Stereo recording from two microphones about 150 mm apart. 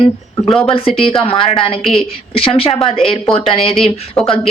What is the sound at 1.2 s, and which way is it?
A woman's voice, 40° left (ahead or behind).